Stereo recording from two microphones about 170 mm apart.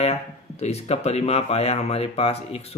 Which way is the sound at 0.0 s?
40° left (ahead or behind).